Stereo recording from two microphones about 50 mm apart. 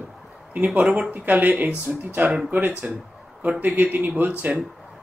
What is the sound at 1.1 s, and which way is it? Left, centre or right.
Speech, right.